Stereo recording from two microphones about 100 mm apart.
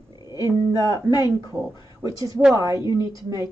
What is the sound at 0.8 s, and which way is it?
A woman's voice, 35° right (ahead or behind).